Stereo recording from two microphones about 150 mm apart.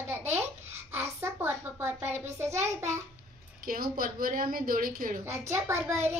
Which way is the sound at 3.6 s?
70° right (ahead or behind).